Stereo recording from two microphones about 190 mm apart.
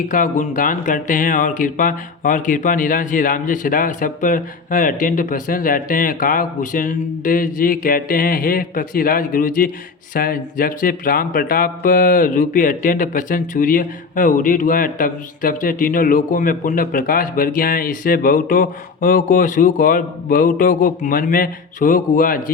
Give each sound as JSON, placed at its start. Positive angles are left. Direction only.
{"t": 0.1, "sound": "speech", "side_deg": 45}